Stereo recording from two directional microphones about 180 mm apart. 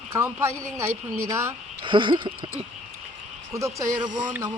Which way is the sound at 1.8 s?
25° right (ahead or behind).